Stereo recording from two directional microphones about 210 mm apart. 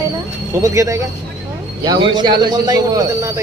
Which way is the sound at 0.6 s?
15° right (ahead or behind).